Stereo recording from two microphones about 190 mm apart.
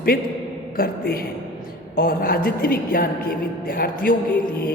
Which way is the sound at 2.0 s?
50° left (ahead or behind).